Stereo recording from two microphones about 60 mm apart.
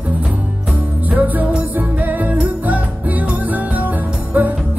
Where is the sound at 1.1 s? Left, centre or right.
Right.